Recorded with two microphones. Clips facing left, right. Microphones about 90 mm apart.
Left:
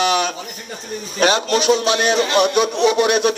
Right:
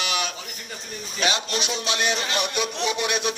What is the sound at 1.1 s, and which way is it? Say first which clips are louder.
Speech: left 9 dB; 50° left (ahead or behind).